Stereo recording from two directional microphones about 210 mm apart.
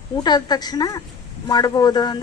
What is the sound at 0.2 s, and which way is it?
Speech, 20° left (ahead or behind).